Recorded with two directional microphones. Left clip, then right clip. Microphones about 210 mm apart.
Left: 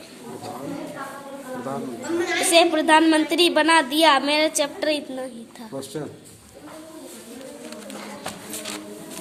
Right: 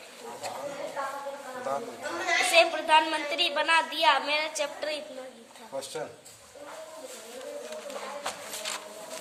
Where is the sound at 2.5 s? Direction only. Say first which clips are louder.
Left 6 dB; 45° left (ahead or behind).